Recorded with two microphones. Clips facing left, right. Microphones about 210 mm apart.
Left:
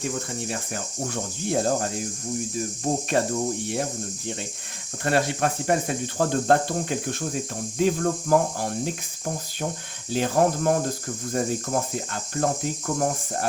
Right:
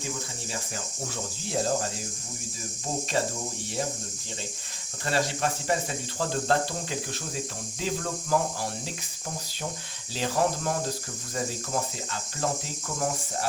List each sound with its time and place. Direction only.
0.0 s cricket: 60° left (ahead or behind)
5.0 s speech: 55° left (ahead or behind)
10.1 s speech: 50° left (ahead or behind)